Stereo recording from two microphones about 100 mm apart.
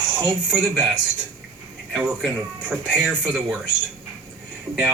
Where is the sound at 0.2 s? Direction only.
20° right (ahead or behind).